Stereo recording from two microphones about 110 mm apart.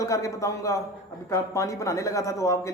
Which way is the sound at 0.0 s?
30° left (ahead or behind).